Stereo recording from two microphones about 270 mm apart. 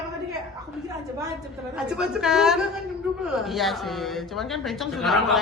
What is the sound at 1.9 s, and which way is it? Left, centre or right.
A man's voice, centre.